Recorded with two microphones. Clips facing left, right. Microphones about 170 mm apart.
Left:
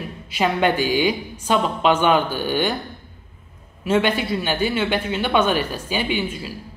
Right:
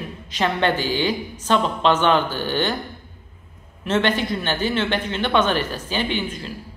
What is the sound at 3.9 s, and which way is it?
Speech, 10° left (ahead or behind).